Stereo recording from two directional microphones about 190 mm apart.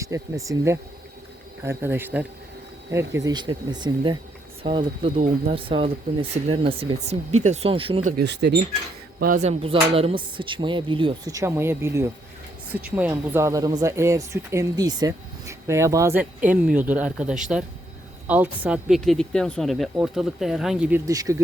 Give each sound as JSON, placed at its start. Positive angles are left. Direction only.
{"t": 0.0, "sound": "speech", "side_deg": -15}
{"t": 3.2, "sound": "speech", "side_deg": -20}
{"t": 8.1, "sound": "speech", "side_deg": -65}
{"t": 9.2, "sound": "speech", "side_deg": -40}
{"t": 21.1, "sound": "speech", "side_deg": -15}